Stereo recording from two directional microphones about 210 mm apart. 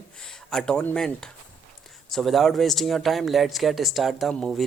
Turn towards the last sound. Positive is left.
turn(degrees=0)  # may be behind; listen again after turning